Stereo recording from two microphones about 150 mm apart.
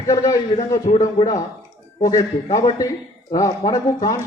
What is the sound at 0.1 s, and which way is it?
Speech, 20° left (ahead or behind).